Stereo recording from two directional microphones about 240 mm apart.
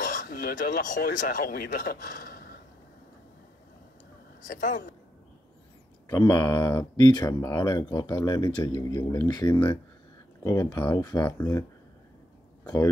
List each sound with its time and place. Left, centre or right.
0.0 s speech: left
4.5 s speech: left
6.0 s speech: centre
12.6 s speech: centre